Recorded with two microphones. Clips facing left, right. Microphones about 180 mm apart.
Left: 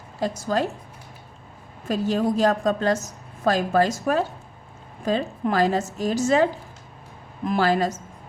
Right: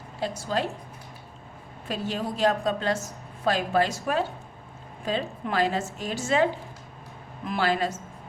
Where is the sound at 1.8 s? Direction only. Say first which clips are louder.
Left 8 dB; 40° left (ahead or behind).